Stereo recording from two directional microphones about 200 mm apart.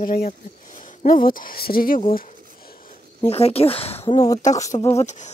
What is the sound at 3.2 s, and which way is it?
Speech, 30° left (ahead or behind).